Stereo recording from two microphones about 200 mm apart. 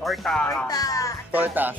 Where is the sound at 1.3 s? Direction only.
10° right (ahead or behind).